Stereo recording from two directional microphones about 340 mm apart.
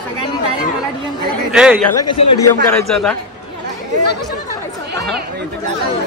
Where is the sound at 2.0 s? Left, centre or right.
Left.